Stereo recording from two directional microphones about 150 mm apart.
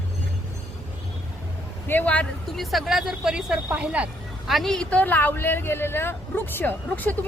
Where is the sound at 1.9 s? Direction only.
10° left (ahead or behind).